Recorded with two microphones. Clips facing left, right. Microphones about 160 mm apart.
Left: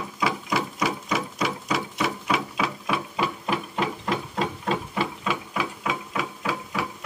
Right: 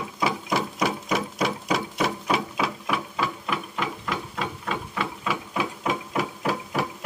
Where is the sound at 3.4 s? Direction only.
30° left (ahead or behind).